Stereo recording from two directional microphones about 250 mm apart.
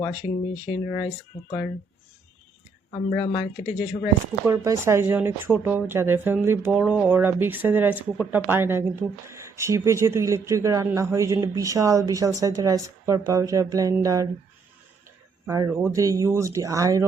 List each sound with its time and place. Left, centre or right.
0.0 s speech: centre
2.9 s speech: left
4.4 s speech: centre
15.4 s speech: centre